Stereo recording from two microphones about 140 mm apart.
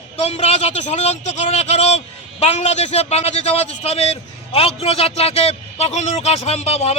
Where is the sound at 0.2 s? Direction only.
50° left (ahead or behind).